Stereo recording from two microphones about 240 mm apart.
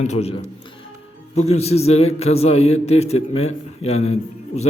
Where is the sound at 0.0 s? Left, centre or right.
Left.